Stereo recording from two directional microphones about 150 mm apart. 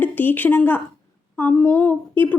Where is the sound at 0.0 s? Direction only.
10° left (ahead or behind).